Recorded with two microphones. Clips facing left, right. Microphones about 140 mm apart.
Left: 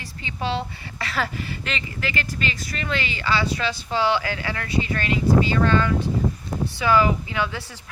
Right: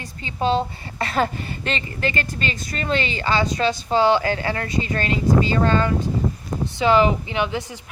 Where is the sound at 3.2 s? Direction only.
45° right (ahead or behind).